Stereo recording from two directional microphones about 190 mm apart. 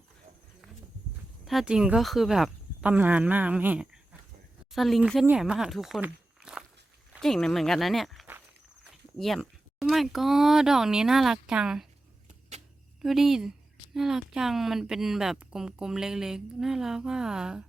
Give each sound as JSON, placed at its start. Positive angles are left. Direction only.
{"t": 1.5, "sound": "speech", "side_deg": -5}
{"t": 12.3, "sound": "vehicle", "side_deg": -35}
{"t": 13.0, "sound": "speech", "side_deg": 0}